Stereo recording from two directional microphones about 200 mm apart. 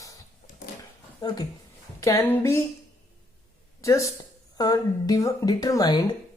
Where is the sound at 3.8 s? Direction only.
15° left (ahead or behind).